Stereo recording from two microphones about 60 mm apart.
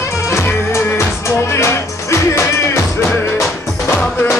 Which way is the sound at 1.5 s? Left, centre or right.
Left.